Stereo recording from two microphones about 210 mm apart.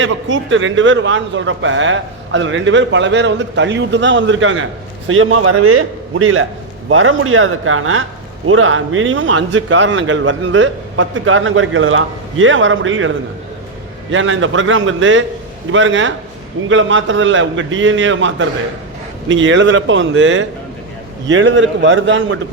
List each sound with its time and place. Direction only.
0.0 s a man's voice: 65° right (ahead or behind)